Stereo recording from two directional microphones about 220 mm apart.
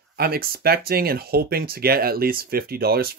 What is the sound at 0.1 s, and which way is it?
Speech, 45° right (ahead or behind).